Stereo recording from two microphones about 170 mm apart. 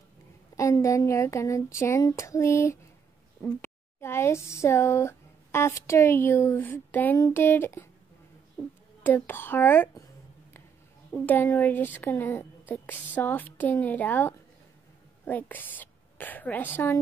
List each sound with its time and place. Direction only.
0.6 s speech: 20° left (ahead or behind)
9.0 s speech: 10° left (ahead or behind)
11.1 s a woman's voice: 10° left (ahead or behind)